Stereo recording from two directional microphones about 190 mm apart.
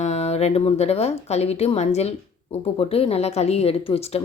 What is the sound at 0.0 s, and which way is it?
Speech, 35° left (ahead or behind).